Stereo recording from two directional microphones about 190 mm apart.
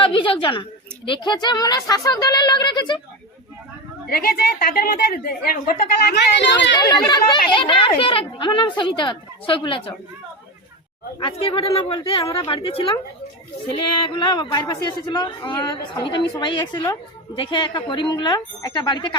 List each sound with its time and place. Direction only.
0.0 s a sound: 25° left (ahead or behind)
1.0 s a man's voice: 25° left (ahead or behind)
4.1 s a woman's voice: 55° left (ahead or behind)
6.7 s a man's voice: 20° left (ahead or behind)
11.2 s a man's voice: 30° left (ahead or behind)
14.1 s a man's voice: 25° left (ahead or behind)